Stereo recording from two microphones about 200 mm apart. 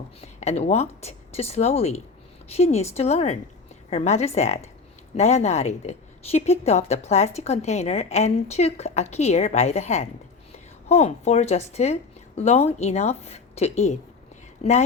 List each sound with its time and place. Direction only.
0.2 s a woman's voice: 35° left (ahead or behind)